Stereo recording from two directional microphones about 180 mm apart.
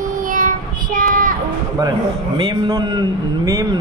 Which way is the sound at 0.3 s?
45° right (ahead or behind).